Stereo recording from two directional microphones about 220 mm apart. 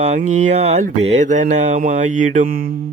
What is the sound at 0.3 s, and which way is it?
Speech, 30° right (ahead or behind).